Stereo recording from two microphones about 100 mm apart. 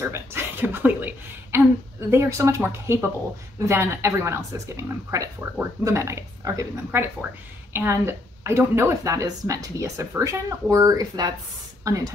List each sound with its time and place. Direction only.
0.0 s a sound: 25° right (ahead or behind)
2.0 s speech: 30° right (ahead or behind)
6.9 s speech: 20° right (ahead or behind)